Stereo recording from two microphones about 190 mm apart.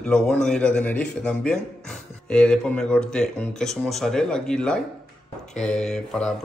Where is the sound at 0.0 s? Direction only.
5° left (ahead or behind).